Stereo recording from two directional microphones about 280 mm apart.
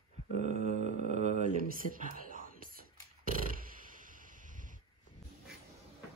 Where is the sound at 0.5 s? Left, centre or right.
Left.